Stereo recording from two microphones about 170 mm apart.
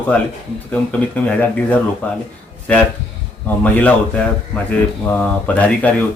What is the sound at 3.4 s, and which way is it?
Speech, 10° left (ahead or behind).